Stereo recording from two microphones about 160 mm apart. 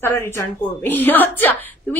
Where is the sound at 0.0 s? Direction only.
15° left (ahead or behind).